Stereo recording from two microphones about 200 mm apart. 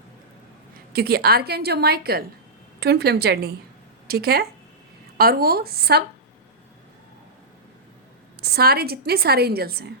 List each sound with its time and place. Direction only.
0.9 s a woman's voice: 50° right (ahead or behind)
8.4 s a woman's voice: 55° right (ahead or behind)